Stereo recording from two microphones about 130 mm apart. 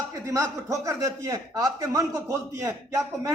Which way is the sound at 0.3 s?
25° right (ahead or behind).